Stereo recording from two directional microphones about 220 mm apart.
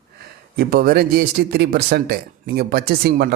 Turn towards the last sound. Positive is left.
turn(degrees=-45)  # may be behind; listen again after turning